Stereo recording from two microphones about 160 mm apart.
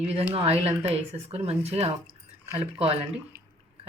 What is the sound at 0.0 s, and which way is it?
Speech, 40° right (ahead or behind).